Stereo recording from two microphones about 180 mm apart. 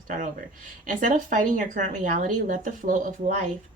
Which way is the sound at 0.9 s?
45° right (ahead or behind).